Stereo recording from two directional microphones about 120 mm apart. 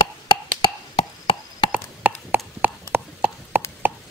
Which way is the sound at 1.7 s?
10° right (ahead or behind).